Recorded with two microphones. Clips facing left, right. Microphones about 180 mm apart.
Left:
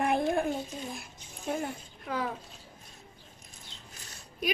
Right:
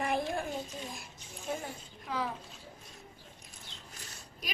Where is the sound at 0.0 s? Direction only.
55° left (ahead or behind).